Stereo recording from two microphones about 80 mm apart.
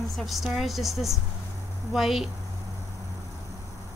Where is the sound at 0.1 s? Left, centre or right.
Centre.